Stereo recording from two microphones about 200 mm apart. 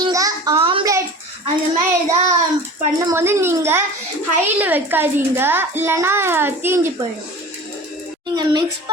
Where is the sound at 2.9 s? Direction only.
15° right (ahead or behind).